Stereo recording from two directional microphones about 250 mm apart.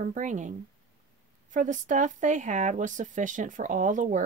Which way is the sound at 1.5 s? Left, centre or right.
Right.